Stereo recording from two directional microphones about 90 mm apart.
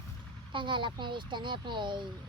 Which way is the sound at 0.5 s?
60° right (ahead or behind).